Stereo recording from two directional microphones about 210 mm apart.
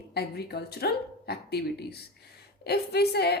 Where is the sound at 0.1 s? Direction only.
50° left (ahead or behind).